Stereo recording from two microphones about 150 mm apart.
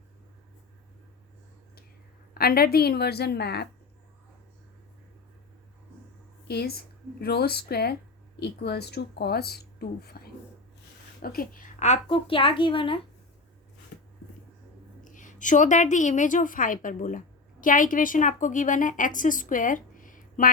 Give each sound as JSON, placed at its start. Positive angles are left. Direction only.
{"t": 2.3, "sound": "speech", "side_deg": 90}
{"t": 6.5, "sound": "speech", "side_deg": 90}
{"t": 11.2, "sound": "a woman's voice", "side_deg": 70}
{"t": 15.0, "sound": "a woman's voice", "side_deg": 60}